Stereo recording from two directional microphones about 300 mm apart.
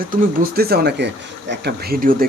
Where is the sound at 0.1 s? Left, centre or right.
Right.